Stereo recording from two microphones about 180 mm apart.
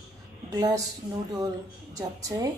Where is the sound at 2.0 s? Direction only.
20° right (ahead or behind).